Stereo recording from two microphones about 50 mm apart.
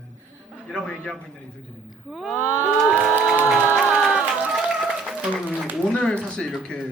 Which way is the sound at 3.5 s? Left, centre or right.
Right.